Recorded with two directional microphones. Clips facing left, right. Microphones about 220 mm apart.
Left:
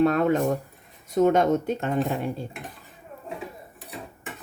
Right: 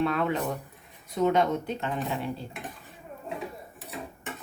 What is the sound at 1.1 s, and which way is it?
Speech, 45° left (ahead or behind).